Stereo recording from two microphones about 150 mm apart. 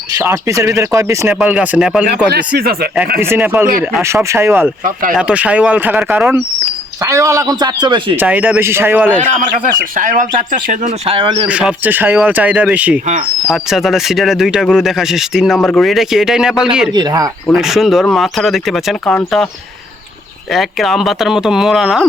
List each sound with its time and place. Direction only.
0.1 s speech: 20° right (ahead or behind)
2.3 s speech: 85° right
3.2 s speech: 15° right (ahead or behind); by 8.1 s 30° right (ahead or behind)
8.1 s speech: 10° right (ahead or behind)
9.9 s speech: 60° right (ahead or behind)
11.1 s speech: 40° right (ahead or behind)
11.4 s speech: 10° right (ahead or behind)
16.9 s speech: 25° right (ahead or behind)
17.5 s speech: centre (ahead or behind)
20.5 s speech: centre (ahead or behind)